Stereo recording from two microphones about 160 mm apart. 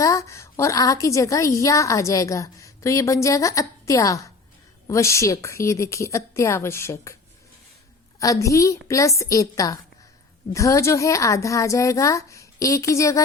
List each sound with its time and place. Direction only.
0.0 s a woman's voice: 20° left (ahead or behind)
8.2 s a woman's voice: 20° left (ahead or behind)